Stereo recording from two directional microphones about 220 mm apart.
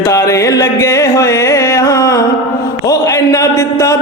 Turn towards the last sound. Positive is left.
turn(degrees=15)  # may be behind; listen again after turning